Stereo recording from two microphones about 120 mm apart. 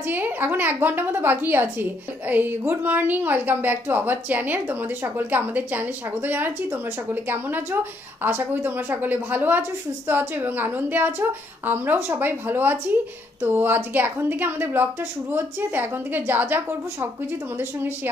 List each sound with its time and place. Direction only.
0.0 s a woman's voice: 15° right (ahead or behind)